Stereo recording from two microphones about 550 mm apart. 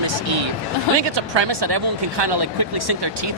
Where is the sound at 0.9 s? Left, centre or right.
Right.